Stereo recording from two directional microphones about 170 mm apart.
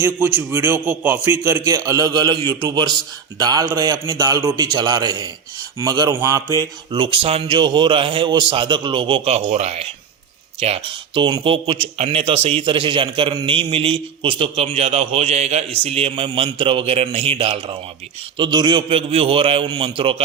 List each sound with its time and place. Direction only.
0.0 s a man's voice: 10° right (ahead or behind); by 20.2 s 30° right (ahead or behind)